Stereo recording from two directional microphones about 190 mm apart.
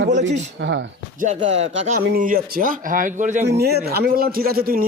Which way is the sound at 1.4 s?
35° right (ahead or behind).